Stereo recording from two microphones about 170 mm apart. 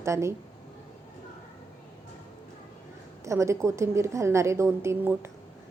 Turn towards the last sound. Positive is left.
turn(degrees=-15)  # may be behind; listen again after turning